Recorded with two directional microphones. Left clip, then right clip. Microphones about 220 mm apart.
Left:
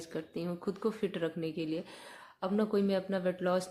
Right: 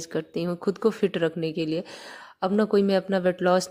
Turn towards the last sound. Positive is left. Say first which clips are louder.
# right 10 dB
turn(degrees=-40)  # may be behind; listen again after turning